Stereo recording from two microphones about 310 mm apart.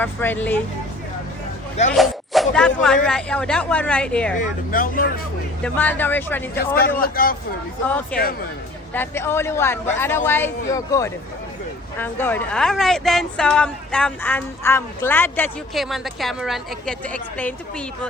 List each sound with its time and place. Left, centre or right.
0.0 s speech: centre
1.9 s speech: centre
4.4 s speech: left
5.6 s speech: centre
7.0 s speech: left
7.9 s speech: centre
8.2 s speech: left
8.9 s speech: centre